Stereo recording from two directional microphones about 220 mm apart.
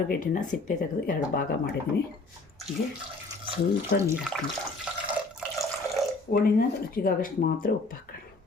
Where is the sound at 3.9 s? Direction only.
10° right (ahead or behind).